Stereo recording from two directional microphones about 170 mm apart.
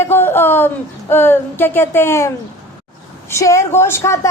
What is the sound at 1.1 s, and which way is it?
A woman's voice, 10° left (ahead or behind).